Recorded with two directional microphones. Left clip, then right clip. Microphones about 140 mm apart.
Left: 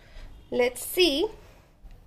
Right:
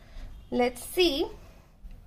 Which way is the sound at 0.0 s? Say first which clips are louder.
Left 2 dB; 15° left (ahead or behind).